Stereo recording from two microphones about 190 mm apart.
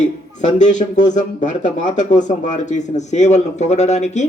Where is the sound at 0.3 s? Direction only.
40° left (ahead or behind).